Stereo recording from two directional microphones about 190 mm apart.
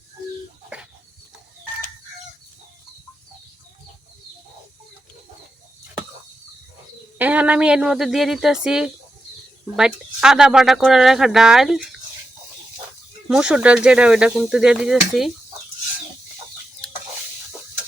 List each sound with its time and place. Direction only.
7.2 s speech: 5° right (ahead or behind)
13.2 s speech: 5° right (ahead or behind)